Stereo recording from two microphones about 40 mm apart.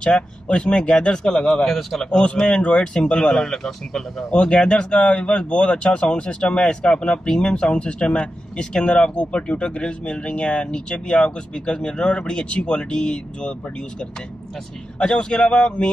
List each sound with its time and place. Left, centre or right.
0.0 s a man's voice: left; by 2.0 s centre
2.0 s speech: left
3.2 s a man's voice: centre
4.3 s speech: left